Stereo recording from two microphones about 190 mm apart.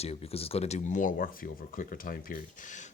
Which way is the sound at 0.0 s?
35° left (ahead or behind).